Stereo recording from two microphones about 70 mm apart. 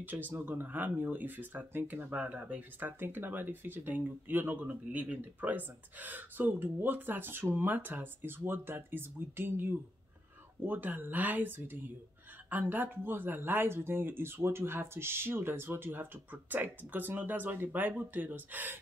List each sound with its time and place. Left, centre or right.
0.0 s speech: right